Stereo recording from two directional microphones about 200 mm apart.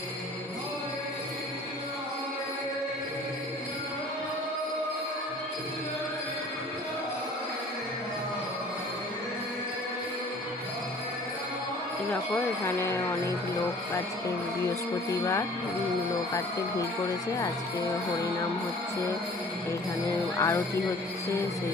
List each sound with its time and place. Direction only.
12.6 s speech: 15° left (ahead or behind)
20.3 s speech: 15° left (ahead or behind)